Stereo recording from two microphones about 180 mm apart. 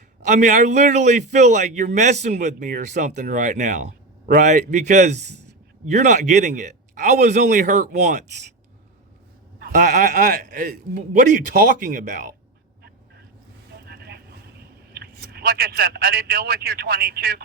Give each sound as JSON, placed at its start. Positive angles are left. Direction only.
{"t": 0.3, "sound": "a man's voice", "side_deg": -45}
{"t": 9.6, "sound": "bleat", "side_deg": -50}
{"t": 10.4, "sound": "a man's voice", "side_deg": -50}
{"t": 13.8, "sound": "vehicle", "side_deg": -65}
{"t": 14.9, "sound": "speech", "side_deg": -60}